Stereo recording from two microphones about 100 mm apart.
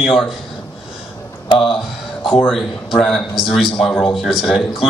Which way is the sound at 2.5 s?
Centre (ahead or behind).